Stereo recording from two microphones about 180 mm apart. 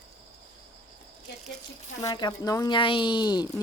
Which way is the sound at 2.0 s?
20° left (ahead or behind).